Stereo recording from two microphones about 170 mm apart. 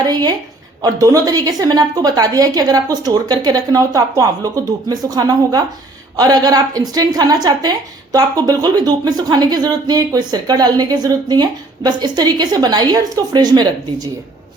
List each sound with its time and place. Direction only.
0.0 s a woman's voice: 25° right (ahead or behind)